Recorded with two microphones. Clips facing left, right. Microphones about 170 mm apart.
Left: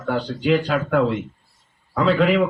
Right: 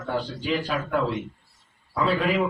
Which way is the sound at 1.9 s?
80° left.